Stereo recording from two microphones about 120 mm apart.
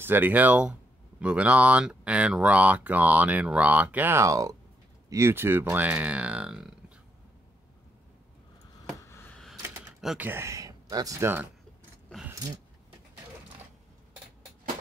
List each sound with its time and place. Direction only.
0.0 s speech: 15° right (ahead or behind)
9.0 s a sound: 25° left (ahead or behind)
9.3 s typewriter: 5° left (ahead or behind)
10.1 s speech: 15° right (ahead or behind)